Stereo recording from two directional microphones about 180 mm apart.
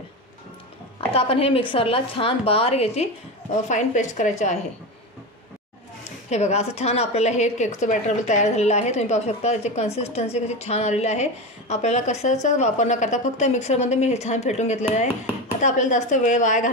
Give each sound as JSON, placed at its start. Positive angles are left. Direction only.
{"t": 1.1, "sound": "a woman's voice", "side_deg": 30}
{"t": 6.3, "sound": "a woman's voice", "side_deg": 35}